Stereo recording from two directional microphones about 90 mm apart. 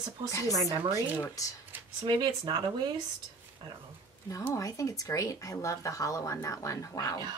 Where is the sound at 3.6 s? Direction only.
60° right (ahead or behind).